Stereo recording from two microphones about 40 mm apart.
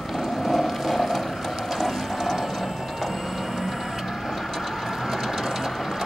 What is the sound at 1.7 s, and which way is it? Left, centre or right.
Ratchet, centre.